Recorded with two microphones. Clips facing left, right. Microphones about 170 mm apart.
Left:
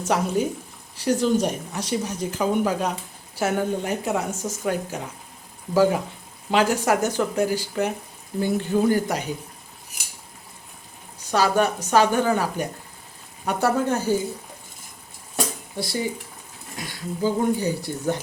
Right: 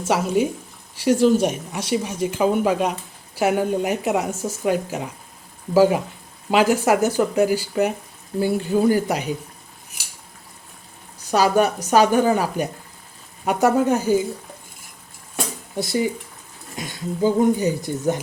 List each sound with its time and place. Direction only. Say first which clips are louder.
0.0 s a woman's voice: right 3 dB; 5° right (ahead or behind)
11.3 s a woman's voice: right 3 dB; 10° right (ahead or behind)
16.7 s speech: right 4 dB; 20° right (ahead or behind)